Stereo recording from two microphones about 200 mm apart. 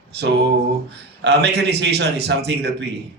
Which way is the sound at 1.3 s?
60° right (ahead or behind).